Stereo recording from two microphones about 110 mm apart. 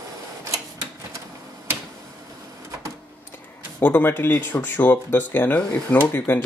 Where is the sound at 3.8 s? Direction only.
20° left (ahead or behind).